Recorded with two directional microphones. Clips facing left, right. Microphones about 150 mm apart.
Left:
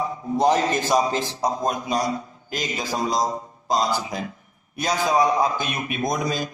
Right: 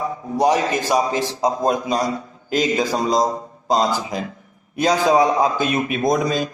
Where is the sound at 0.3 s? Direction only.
10° right (ahead or behind).